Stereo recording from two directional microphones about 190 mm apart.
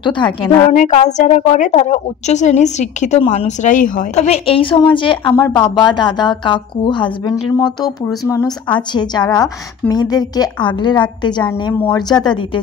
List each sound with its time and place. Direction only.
0.0 s a woman's voice: 25° left (ahead or behind)
0.7 s a woman's voice: 40° left (ahead or behind); by 12.4 s 20° left (ahead or behind)